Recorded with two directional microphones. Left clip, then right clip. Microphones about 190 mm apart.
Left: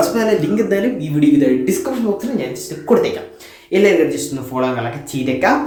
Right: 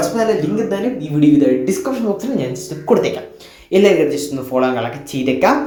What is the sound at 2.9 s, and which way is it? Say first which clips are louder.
Speech: even; 5° right (ahead or behind).